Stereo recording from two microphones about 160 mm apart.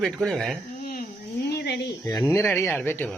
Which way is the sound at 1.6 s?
90° left.